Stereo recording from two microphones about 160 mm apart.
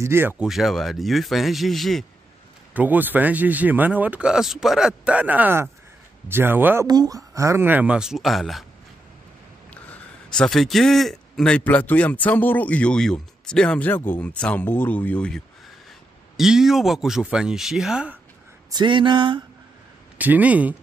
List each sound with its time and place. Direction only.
0.0 s speech: 15° right (ahead or behind)
0.5 s speech: centre (ahead or behind)
2.7 s speech: 10° right (ahead or behind)
6.9 s speech: 25° right (ahead or behind); by 8.6 s centre (ahead or behind)
10.3 s a man's voice: 5° left (ahead or behind)
18.7 s a sound: 30° right (ahead or behind)
20.2 s speech: 10° right (ahead or behind)